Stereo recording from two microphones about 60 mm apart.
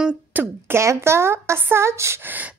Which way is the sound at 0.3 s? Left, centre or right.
Right.